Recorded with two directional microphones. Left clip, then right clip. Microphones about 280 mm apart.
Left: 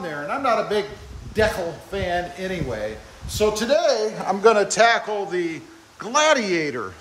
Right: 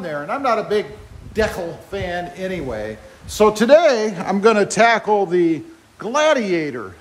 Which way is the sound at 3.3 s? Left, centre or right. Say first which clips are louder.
Right 7 dB; centre.